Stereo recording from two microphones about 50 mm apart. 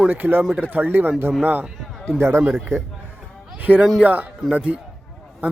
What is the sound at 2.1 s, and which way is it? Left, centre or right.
Speech, right.